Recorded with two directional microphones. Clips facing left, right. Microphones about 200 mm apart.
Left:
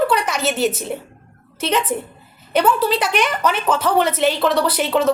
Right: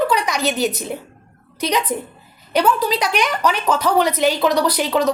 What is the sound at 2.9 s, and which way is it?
Speech, 5° left (ahead or behind).